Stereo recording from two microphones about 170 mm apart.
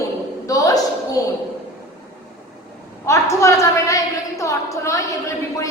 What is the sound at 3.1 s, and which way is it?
A woman's voice, 20° left (ahead or behind).